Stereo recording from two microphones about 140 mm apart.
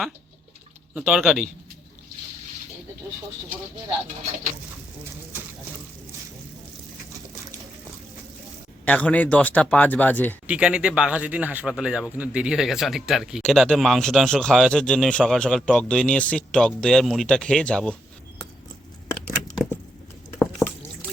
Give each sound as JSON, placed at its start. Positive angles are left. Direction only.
{"t": 0.9, "sound": "speech", "side_deg": -10}
{"t": 8.8, "sound": "speech", "side_deg": 10}
{"t": 10.4, "sound": "speech", "side_deg": -5}
{"t": 20.6, "sound": "liquid", "side_deg": 15}